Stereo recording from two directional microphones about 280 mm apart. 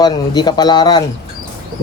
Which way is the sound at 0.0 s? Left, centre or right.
Centre.